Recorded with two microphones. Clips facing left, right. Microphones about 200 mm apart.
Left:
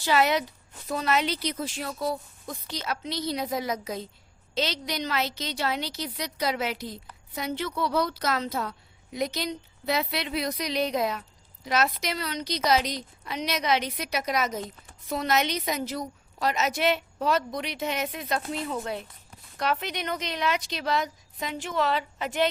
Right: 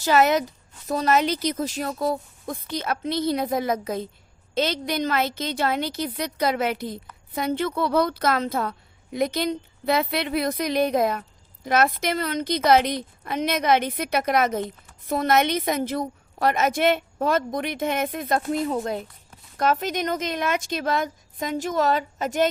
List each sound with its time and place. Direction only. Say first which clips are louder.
0.0 s a woman's voice: right 4 dB; 45° right (ahead or behind)